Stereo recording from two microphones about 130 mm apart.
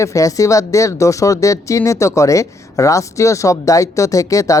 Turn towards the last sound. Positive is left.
turn(degrees=25)  # may be behind; listen again after turning